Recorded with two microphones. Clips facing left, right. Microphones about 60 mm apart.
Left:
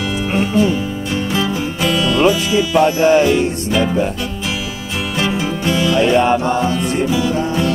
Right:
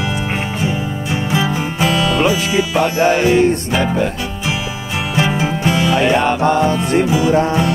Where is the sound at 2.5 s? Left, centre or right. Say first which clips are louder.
Left 2 dB; right.